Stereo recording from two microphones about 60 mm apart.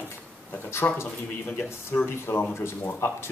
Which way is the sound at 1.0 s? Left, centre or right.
Left.